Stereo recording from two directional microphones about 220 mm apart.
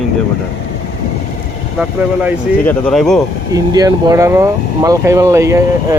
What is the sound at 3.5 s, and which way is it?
Speech, 15° right (ahead or behind).